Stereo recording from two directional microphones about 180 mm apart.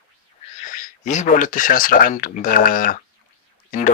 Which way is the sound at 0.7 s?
45° left (ahead or behind).